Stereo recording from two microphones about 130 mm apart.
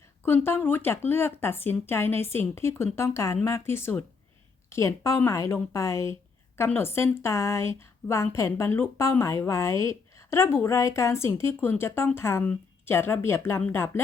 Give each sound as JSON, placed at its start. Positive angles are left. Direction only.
{"t": 0.2, "sound": "speech", "side_deg": 15}